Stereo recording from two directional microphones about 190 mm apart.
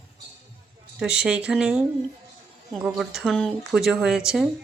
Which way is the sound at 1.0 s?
5° right (ahead or behind).